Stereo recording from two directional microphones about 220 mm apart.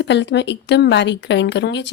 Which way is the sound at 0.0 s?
50° left (ahead or behind).